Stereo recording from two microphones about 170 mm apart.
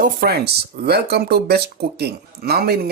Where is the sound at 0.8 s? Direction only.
70° right (ahead or behind).